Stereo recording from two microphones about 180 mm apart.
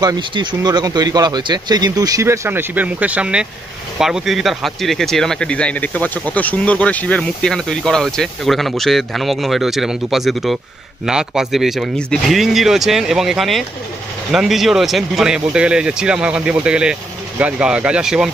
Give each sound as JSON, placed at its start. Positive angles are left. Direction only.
{"t": 0.0, "sound": "speech", "side_deg": -25}